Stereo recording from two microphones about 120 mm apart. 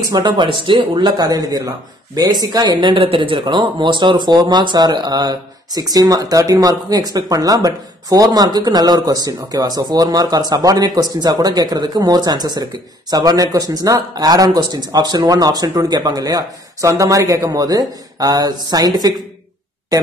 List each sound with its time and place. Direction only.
0.1 s speech: 35° right (ahead or behind)